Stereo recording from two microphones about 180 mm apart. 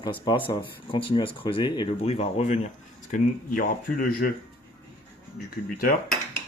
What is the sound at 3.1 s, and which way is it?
Speech, 50° left (ahead or behind).